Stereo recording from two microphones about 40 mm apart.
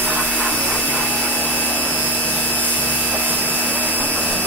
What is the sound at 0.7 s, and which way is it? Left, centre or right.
Rub, left.